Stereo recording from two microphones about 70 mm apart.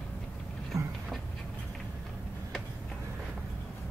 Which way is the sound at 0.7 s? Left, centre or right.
Right.